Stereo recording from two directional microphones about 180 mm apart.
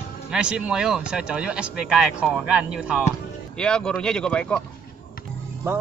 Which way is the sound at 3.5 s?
5° left (ahead or behind).